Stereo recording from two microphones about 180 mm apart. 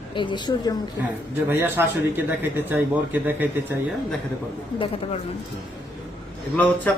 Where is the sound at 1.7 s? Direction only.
10° right (ahead or behind).